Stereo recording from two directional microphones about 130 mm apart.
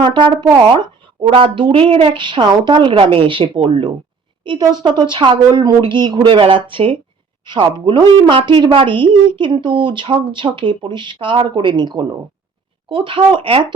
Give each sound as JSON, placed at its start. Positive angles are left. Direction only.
{"t": 0.0, "sound": "a woman's voice", "side_deg": -40}